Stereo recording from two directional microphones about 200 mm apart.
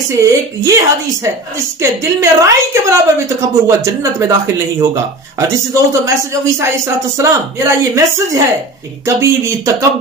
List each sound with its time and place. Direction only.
0.1 s a woman's voice: 15° right (ahead or behind)